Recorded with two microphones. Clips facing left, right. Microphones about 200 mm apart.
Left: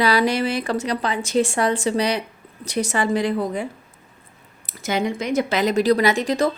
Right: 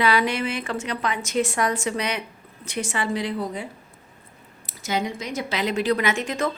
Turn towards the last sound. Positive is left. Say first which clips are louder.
# left 5 dB
turn(degrees=35)  # may be behind; listen again after turning